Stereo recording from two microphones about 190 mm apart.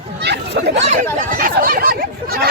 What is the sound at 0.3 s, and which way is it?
Children playing, 60° right (ahead or behind).